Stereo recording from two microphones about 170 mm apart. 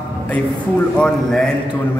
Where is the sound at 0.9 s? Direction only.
5° left (ahead or behind).